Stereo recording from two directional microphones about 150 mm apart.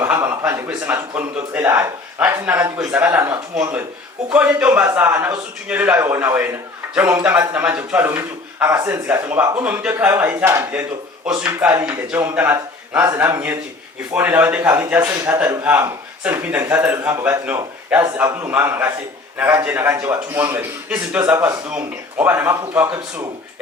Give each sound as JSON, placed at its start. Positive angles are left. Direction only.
{"t": 0.0, "sound": "a man's voice", "side_deg": -15}